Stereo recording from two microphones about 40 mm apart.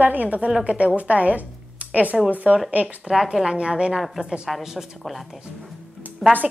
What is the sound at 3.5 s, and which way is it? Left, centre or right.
Speech, right.